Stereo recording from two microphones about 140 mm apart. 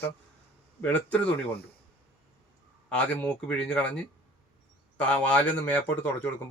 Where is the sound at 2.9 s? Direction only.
5° left (ahead or behind).